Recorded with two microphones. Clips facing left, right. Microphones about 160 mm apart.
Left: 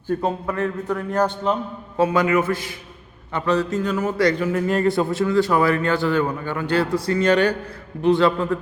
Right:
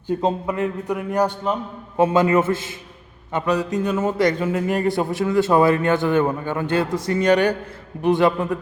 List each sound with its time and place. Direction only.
0.1 s a man's voice: 20° right (ahead or behind)
2.0 s a man's voice: 25° right (ahead or behind)